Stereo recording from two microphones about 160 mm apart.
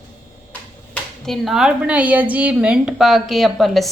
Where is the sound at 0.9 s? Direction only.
Centre (ahead or behind).